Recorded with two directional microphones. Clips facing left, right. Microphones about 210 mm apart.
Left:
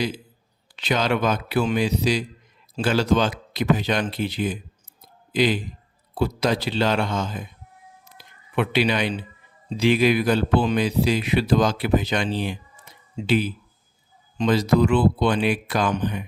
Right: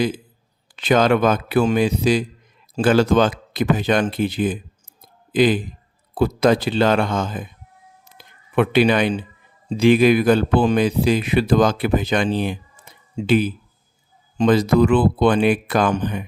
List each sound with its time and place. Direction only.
0.8 s speech: 50° right (ahead or behind)